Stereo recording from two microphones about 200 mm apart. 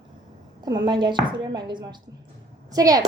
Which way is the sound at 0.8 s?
25° right (ahead or behind).